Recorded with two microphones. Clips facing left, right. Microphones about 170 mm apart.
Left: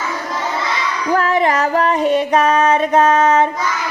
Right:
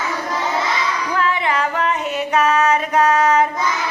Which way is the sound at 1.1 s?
45° left (ahead or behind).